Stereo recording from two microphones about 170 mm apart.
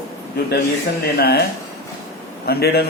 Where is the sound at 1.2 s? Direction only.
70° left (ahead or behind).